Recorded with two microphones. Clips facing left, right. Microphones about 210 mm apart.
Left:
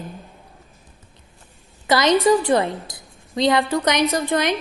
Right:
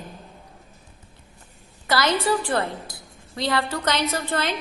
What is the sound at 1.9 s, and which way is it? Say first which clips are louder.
A woman's voice: left 6 dB; 20° left (ahead or behind).